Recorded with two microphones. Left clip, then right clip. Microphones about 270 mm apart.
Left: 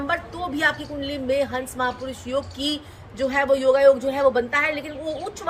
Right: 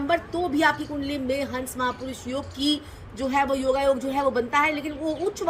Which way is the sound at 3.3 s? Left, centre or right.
Centre.